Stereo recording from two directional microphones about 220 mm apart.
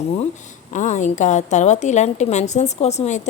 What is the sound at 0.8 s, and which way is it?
A woman's voice, 35° left (ahead or behind).